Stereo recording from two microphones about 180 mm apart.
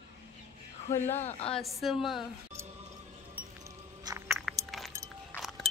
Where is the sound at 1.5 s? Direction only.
Centre (ahead or behind).